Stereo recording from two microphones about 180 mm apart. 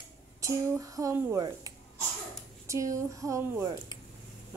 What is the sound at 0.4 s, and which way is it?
Speech, 20° right (ahead or behind).